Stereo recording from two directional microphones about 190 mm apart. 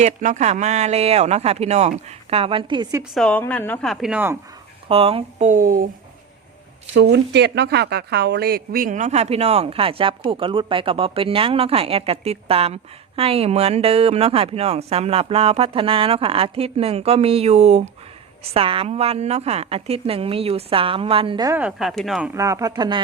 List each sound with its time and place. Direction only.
0.0 s speech: 40° right (ahead or behind); by 3.0 s 25° right (ahead or behind)
3.0 s a woman's voice: 5° left (ahead or behind)
4.9 s speech: 30° right (ahead or behind)
6.9 s speech: 65° right (ahead or behind); by 21.5 s 25° right (ahead or behind)
21.5 s a woman's voice: 5° right (ahead or behind)
22.3 s speech: 15° right (ahead or behind)